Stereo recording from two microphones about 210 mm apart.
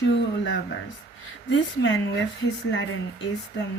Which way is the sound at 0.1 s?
60° left (ahead or behind).